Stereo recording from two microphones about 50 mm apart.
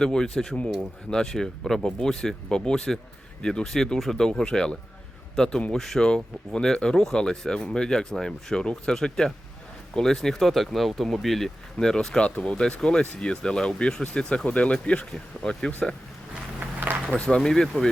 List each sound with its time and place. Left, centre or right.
0.0 s speech: centre
16.6 s a sound: right
17.2 s speech: centre